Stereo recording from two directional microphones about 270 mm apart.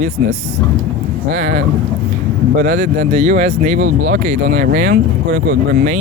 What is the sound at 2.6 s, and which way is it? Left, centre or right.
Speech, right.